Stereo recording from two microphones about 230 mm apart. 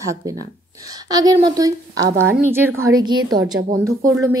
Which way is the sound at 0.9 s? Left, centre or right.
Centre.